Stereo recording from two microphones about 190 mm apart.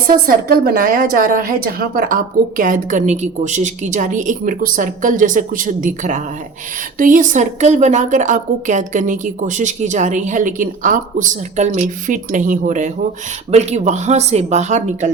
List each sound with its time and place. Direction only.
0.3 s a woman's voice: 50° right (ahead or behind)